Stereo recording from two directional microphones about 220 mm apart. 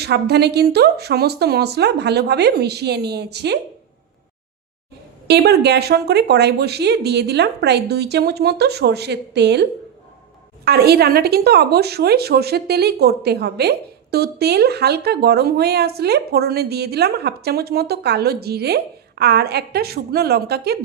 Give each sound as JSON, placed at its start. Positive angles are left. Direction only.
{"t": 0.0, "sound": "a woman's voice", "side_deg": -50}
{"t": 5.3, "sound": "a woman's voice", "side_deg": -50}
{"t": 10.7, "sound": "a woman's voice", "side_deg": -45}